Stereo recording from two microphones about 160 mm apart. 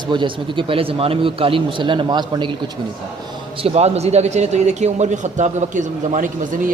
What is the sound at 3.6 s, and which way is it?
A man's voice, 40° right (ahead or behind).